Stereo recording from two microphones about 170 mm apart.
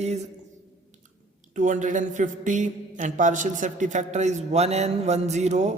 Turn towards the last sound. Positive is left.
turn(degrees=-40)  # may be behind; listen again after turning